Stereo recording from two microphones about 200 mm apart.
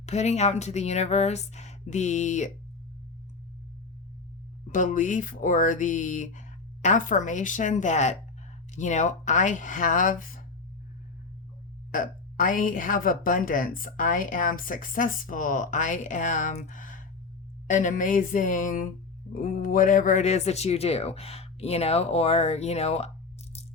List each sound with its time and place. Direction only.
0.0 s speech: 35° left (ahead or behind)
4.7 s speech: 40° left (ahead or behind)
11.9 s a woman's voice: 40° left (ahead or behind)